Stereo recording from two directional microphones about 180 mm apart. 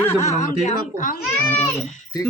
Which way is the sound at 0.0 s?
15° left (ahead or behind).